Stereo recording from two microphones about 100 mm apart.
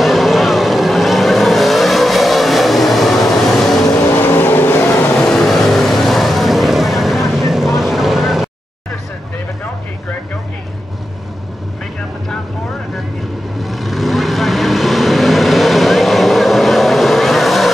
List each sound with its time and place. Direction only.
0.0 s vehicle: centre (ahead or behind)
4.0 s vehicle: 25° left (ahead or behind)
5.2 s vehicle: 5° left (ahead or behind)
13.6 s vehicle: centre (ahead or behind)